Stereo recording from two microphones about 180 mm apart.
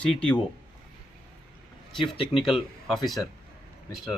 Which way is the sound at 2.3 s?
Centre (ahead or behind).